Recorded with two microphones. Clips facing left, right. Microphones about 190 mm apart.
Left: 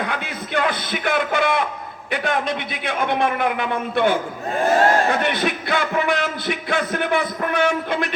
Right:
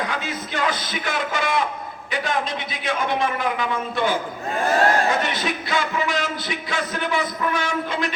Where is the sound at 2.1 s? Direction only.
60° left (ahead or behind).